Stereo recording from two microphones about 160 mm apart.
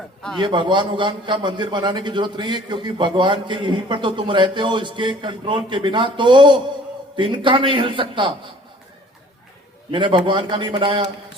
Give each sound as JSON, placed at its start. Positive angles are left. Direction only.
{"t": 0.3, "sound": "a man's voice", "side_deg": -30}
{"t": 9.9, "sound": "a man's voice", "side_deg": -30}